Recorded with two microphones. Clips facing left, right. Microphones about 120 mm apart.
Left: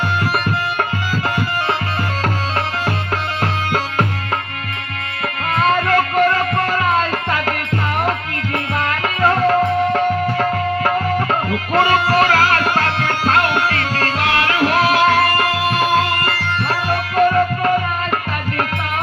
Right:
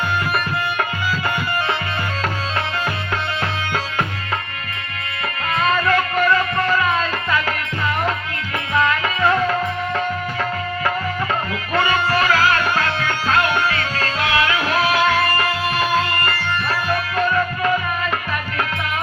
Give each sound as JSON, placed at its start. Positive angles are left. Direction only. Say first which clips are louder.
{"t": 3.4, "sound": "music", "louder": "left 4 dB", "side_deg": 45}
{"t": 5.5, "sound": "music", "louder": "left 3 dB", "side_deg": 45}
{"t": 8.7, "sound": "music", "louder": "right 5 dB", "side_deg": 45}
{"t": 11.7, "sound": "music", "louder": "left 4 dB", "side_deg": 40}